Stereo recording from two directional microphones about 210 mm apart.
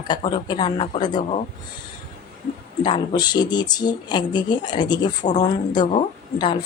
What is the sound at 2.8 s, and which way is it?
A woman's voice, 20° left (ahead or behind).